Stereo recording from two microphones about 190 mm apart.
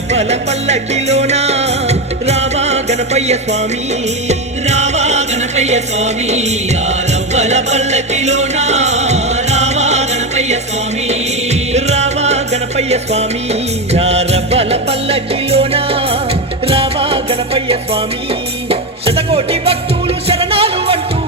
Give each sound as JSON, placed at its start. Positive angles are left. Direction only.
{"t": 0.1, "sound": "music", "side_deg": -35}
{"t": 11.7, "sound": "music", "side_deg": -35}